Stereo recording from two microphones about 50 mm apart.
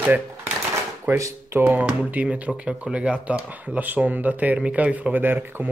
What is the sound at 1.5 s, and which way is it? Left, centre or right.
Speech, right.